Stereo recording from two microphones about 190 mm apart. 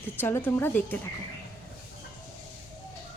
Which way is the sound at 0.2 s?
10° left (ahead or behind).